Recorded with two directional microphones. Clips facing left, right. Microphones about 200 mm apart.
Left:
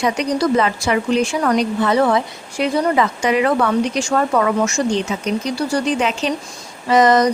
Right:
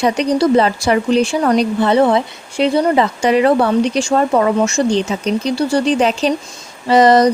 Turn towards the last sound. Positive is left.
turn(degrees=-35)  # may be behind; listen again after turning